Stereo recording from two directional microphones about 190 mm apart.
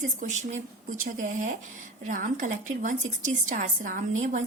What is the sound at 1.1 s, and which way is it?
Speech, 40° right (ahead or behind).